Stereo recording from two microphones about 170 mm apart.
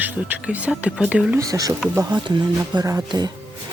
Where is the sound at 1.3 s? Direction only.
20° right (ahead or behind).